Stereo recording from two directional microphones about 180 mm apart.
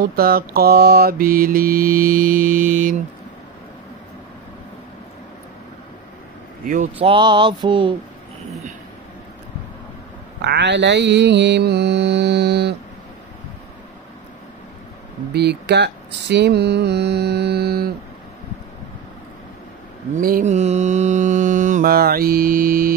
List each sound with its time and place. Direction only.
0.0 s mantra: 55° right (ahead or behind)
6.6 s speech: 45° right (ahead or behind)
7.0 s speech: 25° right (ahead or behind)
10.4 s mantra: 70° right (ahead or behind)
15.3 s speech: 65° right (ahead or behind)
20.2 s mantra: 50° right (ahead or behind)